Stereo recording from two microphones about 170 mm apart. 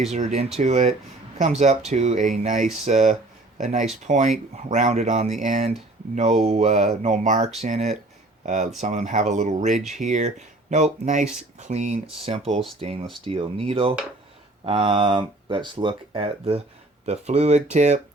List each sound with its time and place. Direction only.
0.1 s speech: 40° right (ahead or behind)